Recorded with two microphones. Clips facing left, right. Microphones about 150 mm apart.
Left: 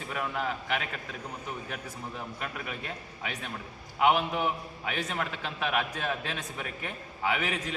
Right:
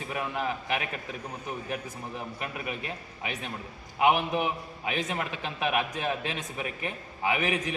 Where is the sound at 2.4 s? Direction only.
15° right (ahead or behind).